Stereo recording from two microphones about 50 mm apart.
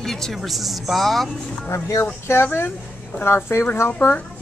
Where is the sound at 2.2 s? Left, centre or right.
Left.